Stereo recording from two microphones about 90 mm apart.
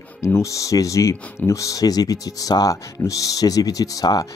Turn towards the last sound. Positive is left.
turn(degrees=45)  # may be behind; listen again after turning